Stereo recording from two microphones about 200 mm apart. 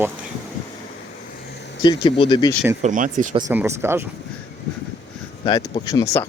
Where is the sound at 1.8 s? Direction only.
20° left (ahead or behind).